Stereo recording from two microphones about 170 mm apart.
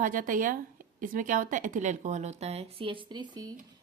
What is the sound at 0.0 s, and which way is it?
A woman's voice, 50° right (ahead or behind).